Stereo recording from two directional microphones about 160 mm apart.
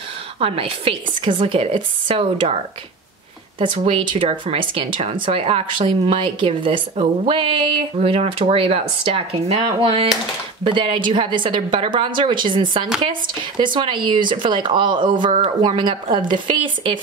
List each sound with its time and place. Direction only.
0.4 s speech: 35° right (ahead or behind)
3.5 s speech: 35° right (ahead or behind)